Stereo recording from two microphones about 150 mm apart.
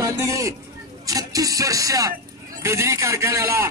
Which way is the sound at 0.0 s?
20° right (ahead or behind).